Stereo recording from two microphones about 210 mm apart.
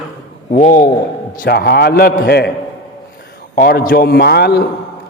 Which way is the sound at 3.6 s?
45° left (ahead or behind).